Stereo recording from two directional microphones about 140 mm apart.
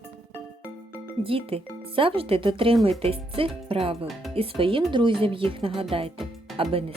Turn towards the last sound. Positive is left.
turn(degrees=0)  # may be behind; listen again after turning